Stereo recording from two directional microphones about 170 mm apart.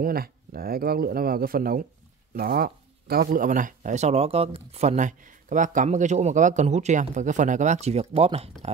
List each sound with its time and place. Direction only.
0.0 s speech: 60° right (ahead or behind); by 8.5 s 35° right (ahead or behind)